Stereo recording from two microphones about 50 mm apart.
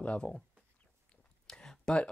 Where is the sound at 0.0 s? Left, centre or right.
Left.